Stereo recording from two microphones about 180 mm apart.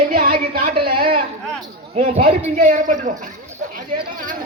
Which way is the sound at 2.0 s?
40° right (ahead or behind).